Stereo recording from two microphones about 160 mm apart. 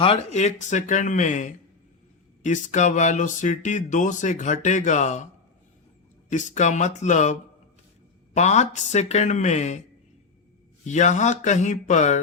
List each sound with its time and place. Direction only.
0.0 s speech: 40° left (ahead or behind)
6.3 s speech: 50° left (ahead or behind)
8.4 s speech: 45° left (ahead or behind)
10.8 s speech: 50° left (ahead or behind)